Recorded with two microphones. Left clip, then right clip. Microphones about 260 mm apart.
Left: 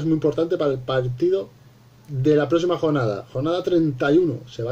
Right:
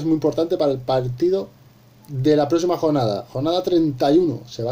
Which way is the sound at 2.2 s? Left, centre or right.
Centre.